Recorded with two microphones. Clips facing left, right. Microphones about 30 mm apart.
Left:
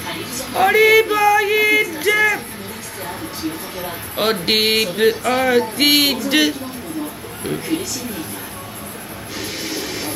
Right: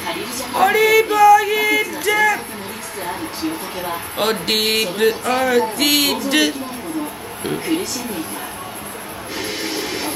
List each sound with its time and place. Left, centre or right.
0.0 s female singing: centre
0.6 s a sound: centre
4.2 s a man's voice: centre
9.4 s music: right